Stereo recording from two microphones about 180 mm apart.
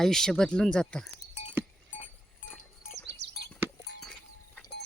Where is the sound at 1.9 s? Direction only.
45° left (ahead or behind).